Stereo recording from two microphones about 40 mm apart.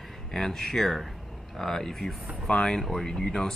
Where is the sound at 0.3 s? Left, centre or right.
Centre.